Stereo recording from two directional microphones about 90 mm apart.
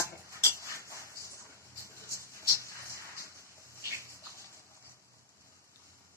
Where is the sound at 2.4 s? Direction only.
35° left (ahead or behind).